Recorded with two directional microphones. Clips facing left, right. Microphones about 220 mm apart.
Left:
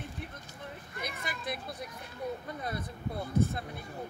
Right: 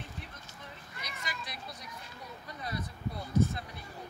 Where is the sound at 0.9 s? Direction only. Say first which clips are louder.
Left 4 dB; 55° left (ahead or behind).